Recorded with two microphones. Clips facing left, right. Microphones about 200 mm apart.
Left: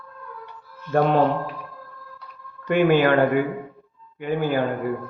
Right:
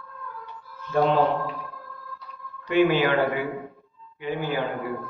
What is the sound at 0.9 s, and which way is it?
Speech, 55° left (ahead or behind).